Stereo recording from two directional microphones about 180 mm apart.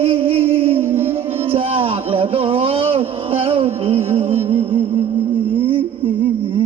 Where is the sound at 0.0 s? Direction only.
30° right (ahead or behind).